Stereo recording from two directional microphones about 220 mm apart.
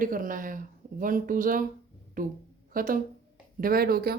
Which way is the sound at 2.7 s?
40° right (ahead or behind).